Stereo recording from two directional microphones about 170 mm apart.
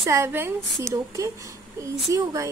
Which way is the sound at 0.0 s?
15° right (ahead or behind).